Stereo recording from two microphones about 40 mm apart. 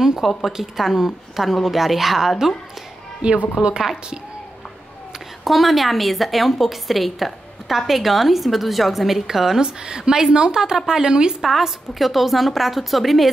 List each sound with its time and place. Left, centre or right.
0.2 s a woman's voice: centre
3.2 s a woman's voice: right
3.7 s speech: centre
5.4 s a woman's voice: centre; by 11.3 s right
11.4 s a woman's voice: centre